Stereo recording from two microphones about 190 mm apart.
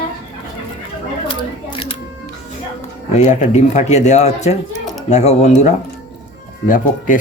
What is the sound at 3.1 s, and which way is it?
Speech, 35° left (ahead or behind).